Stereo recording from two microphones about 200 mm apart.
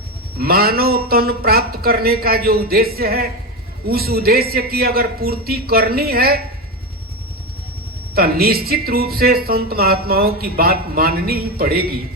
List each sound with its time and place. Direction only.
0.3 s speech: 50° right (ahead or behind)
8.1 s speech: 50° right (ahead or behind)